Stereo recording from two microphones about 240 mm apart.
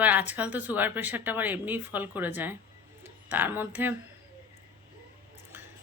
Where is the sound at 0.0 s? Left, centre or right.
Centre.